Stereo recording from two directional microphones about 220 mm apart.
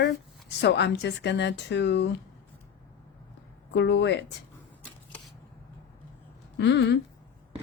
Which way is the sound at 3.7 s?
50° left (ahead or behind).